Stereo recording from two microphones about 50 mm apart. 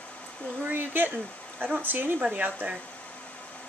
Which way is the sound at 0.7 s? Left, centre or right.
Right.